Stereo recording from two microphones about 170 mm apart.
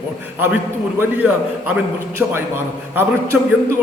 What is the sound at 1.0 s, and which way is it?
A man's voice, 10° right (ahead or behind).